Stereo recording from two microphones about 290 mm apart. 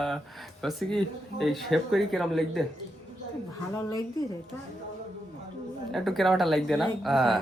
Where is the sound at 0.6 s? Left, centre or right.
Centre.